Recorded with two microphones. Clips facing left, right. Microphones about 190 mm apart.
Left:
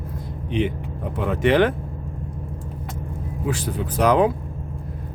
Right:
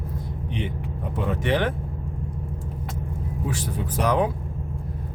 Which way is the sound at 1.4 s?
90° left.